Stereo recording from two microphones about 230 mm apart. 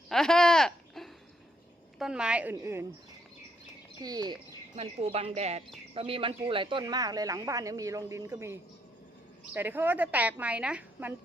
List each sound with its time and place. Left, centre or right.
0.1 s a sound: centre
2.0 s a woman's voice: centre
4.0 s a woman's voice: centre
4.7 s a woman's voice: right; by 11.1 s centre